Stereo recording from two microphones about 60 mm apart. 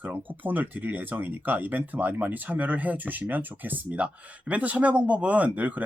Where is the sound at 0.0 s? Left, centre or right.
Right.